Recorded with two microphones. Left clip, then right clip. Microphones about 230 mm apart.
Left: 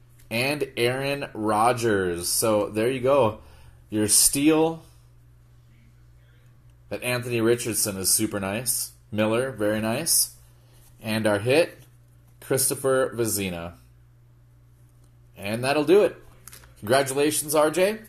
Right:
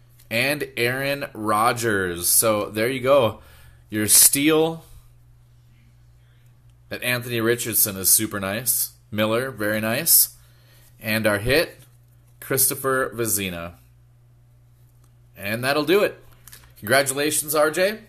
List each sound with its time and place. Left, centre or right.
0.3 s speech: right
6.9 s speech: right
15.4 s speech: right